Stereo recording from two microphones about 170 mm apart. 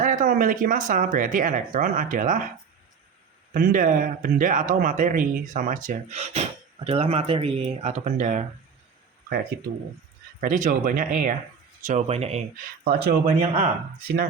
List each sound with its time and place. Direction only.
0.0 s speech: 50° right (ahead or behind)
3.5 s speech: 55° right (ahead or behind)
10.4 s speech: 50° right (ahead or behind)
11.9 s speech: 40° right (ahead or behind)
12.8 s speech: 65° right (ahead or behind)
13.2 s speech: 35° right (ahead or behind)